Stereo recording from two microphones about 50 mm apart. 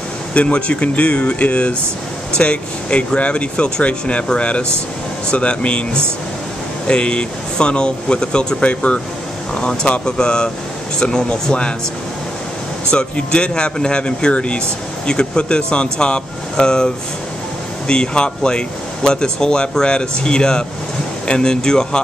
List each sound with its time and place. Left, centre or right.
0.3 s speech: left
6.9 s speech: left
12.9 s speech: centre